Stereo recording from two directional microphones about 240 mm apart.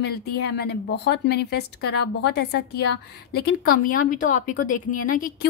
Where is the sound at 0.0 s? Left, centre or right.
Left.